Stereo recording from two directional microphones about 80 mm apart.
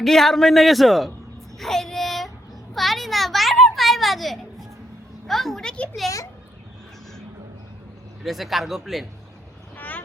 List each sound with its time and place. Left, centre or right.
0.0 s a child's voice: centre
1.5 s child singing: centre
2.7 s a child's voice: centre
8.2 s a child's voice: centre
9.7 s vehicle: left